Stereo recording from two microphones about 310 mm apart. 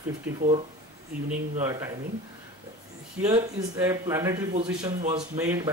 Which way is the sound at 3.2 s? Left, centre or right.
Centre.